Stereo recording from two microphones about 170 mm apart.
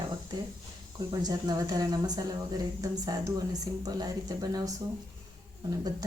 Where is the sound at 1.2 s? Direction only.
20° right (ahead or behind).